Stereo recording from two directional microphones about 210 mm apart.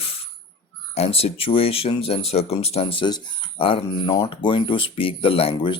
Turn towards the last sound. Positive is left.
turn(degrees=25)  # may be behind; listen again after turning